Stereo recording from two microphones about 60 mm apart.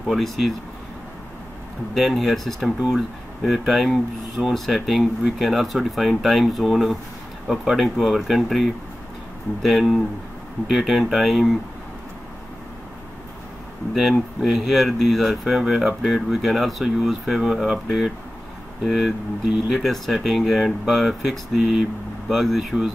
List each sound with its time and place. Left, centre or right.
0.0 s speech: centre
2.0 s speech: centre
14.4 s speech: centre